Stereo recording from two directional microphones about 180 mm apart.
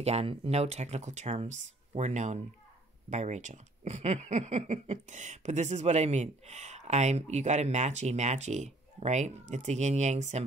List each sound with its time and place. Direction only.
0.0 s speech: 35° right (ahead or behind)